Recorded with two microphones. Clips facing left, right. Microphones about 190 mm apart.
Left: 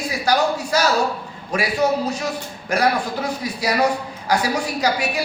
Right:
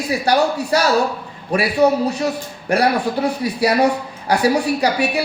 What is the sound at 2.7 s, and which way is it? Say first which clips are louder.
A man's voice: right 3 dB; 35° right (ahead or behind).